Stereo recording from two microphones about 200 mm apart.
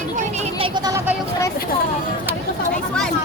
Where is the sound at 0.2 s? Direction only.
35° right (ahead or behind).